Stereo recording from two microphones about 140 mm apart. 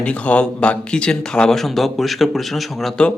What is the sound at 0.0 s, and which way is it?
Speech, 10° left (ahead or behind).